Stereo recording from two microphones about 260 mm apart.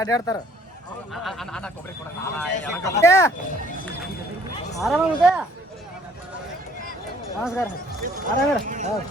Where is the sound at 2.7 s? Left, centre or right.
Centre.